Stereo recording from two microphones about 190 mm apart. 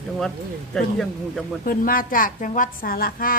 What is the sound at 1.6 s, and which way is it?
A woman's voice, 45° left (ahead or behind).